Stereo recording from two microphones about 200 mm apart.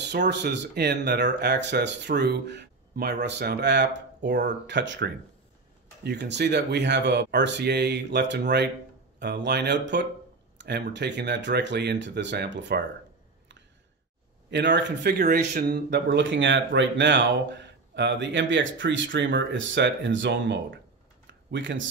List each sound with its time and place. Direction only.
0.0 s speech: 60° right (ahead or behind)
14.5 s speech: 60° right (ahead or behind)
21.3 s a sound: 65° right (ahead or behind)